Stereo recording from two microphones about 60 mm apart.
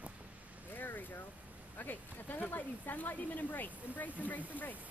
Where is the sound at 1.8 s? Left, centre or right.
Left.